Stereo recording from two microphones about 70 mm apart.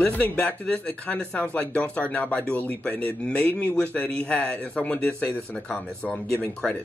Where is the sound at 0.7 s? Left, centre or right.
Centre.